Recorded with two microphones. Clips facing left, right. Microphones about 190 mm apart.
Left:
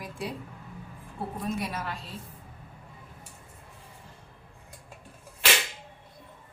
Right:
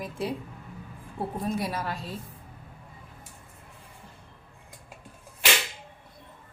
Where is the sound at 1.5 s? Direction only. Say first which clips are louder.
Right 2 dB; 35° right (ahead or behind).